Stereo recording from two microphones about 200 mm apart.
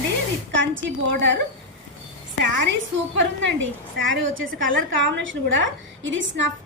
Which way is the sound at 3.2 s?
70° right (ahead or behind).